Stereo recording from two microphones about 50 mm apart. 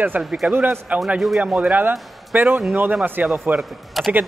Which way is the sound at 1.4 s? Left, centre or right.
Right.